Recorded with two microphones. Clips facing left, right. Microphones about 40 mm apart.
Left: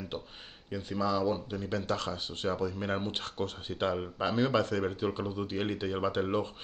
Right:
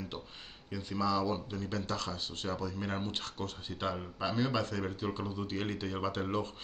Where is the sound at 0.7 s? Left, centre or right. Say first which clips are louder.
Left 2 dB; left.